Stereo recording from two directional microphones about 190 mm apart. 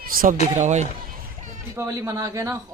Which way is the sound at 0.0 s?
50° right (ahead or behind).